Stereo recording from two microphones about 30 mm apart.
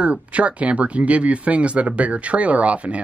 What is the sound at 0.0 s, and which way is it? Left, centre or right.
Speech, right.